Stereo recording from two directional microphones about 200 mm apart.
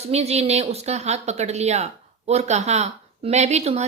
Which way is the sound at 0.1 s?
30° right (ahead or behind).